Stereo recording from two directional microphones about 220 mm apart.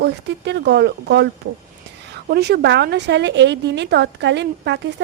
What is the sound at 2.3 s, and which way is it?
A woman's voice, 45° right (ahead or behind).